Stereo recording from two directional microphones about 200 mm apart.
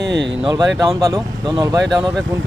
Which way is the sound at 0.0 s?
60° right (ahead or behind).